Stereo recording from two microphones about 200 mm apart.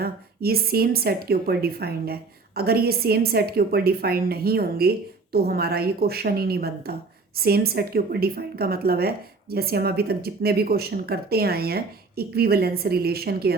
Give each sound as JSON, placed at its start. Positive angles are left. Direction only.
{"t": 0.0, "sound": "a woman's voice", "side_deg": -50}